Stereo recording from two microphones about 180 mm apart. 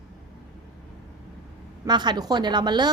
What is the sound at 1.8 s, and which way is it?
A woman's voice, 25° right (ahead or behind).